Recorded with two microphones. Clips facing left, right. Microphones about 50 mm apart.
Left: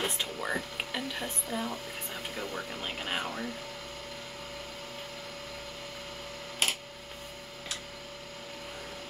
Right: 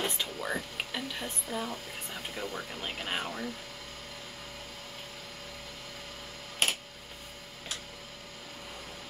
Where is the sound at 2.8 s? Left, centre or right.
Centre.